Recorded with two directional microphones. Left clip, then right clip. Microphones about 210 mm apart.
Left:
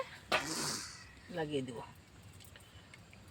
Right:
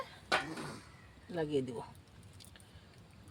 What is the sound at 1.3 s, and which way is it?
Speech, 60° right (ahead or behind).